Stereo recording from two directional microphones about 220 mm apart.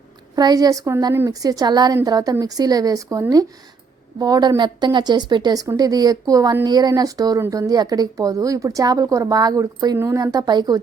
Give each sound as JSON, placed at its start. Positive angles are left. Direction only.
{"t": 0.3, "sound": "a woman's voice", "side_deg": -15}